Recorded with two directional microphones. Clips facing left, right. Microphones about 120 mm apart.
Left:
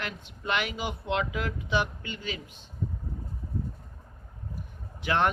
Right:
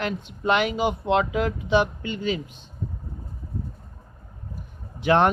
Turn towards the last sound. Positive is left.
turn(degrees=-25)  # may be behind; listen again after turning